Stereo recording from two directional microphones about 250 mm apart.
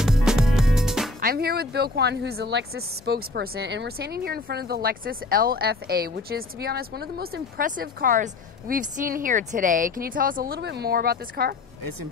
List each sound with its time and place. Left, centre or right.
0.0 s music: centre
1.2 s speech: right